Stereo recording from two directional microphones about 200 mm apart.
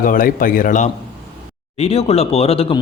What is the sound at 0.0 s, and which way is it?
Speech, 45° left (ahead or behind).